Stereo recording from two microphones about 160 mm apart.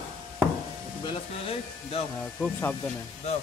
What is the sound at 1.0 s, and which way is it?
Speech, 35° left (ahead or behind).